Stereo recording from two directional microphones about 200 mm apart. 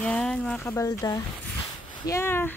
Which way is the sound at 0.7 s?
15° left (ahead or behind).